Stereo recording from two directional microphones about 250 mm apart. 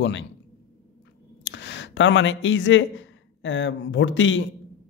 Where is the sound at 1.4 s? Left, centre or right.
Left.